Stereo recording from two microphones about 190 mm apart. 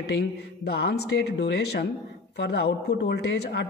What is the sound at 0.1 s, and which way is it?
Speech, 60° left (ahead or behind).